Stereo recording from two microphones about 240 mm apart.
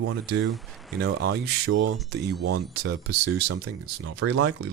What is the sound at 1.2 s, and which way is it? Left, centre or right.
Speech, right.